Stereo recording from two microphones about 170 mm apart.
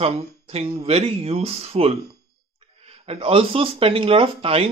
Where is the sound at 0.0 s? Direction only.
35° right (ahead or behind).